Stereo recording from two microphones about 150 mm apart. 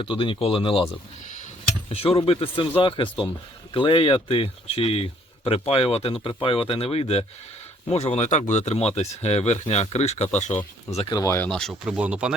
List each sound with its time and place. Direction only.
0.0 s speech: 35° left (ahead or behind)
1.9 s speech: 40° left (ahead or behind)
11.1 s speech: 20° left (ahead or behind)
11.4 s speech: 5° left (ahead or behind)
11.7 s speech: 10° right (ahead or behind)